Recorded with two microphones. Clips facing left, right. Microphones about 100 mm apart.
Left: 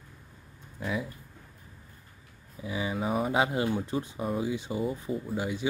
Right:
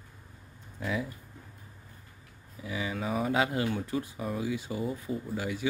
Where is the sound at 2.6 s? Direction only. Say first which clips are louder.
Left 2 dB; 25° left (ahead or behind).